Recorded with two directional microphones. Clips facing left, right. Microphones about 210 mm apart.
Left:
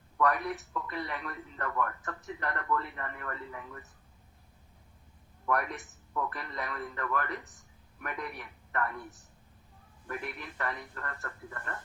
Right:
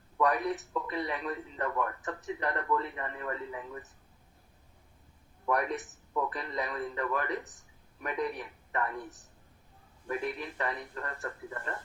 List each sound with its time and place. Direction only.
0.2 s speech: 15° right (ahead or behind)
6.1 s speech: 15° right (ahead or behind)
10.1 s speech: 15° right (ahead or behind)